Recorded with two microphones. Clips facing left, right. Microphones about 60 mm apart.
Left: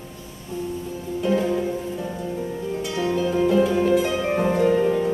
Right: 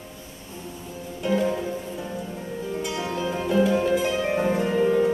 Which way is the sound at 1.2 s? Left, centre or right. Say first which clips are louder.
Left 2 dB; centre.